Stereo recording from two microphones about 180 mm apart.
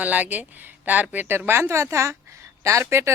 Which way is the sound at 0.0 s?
10° right (ahead or behind).